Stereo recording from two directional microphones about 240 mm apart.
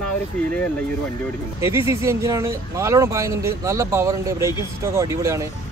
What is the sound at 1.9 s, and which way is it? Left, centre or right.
Speech, centre.